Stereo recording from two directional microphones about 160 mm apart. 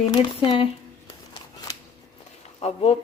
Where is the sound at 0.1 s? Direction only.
25° left (ahead or behind).